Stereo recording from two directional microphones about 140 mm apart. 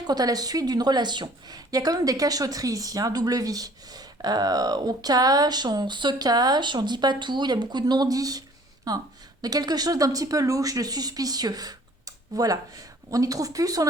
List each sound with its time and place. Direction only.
0.1 s a woman's voice: 30° right (ahead or behind)